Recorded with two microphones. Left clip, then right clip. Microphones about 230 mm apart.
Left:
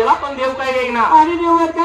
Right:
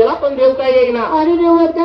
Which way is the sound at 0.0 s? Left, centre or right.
Left.